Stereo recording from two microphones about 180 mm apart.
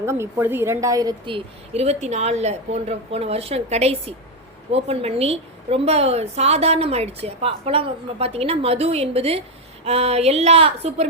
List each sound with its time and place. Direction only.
0.0 s a woman's voice: 15° right (ahead or behind); by 11.0 s 35° right (ahead or behind)